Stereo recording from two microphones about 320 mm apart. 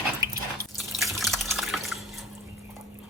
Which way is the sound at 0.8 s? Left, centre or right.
Centre.